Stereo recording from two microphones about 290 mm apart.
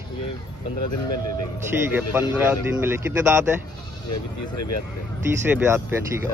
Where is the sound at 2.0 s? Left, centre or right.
Centre.